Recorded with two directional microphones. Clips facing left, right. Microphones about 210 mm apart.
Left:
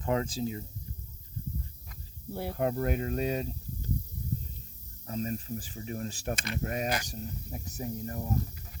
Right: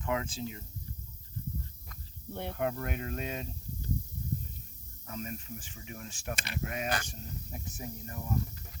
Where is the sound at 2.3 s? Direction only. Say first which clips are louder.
Left 3 dB; 5° left (ahead or behind).